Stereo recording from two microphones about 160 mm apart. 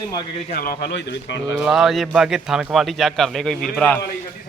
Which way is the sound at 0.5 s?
65° left (ahead or behind).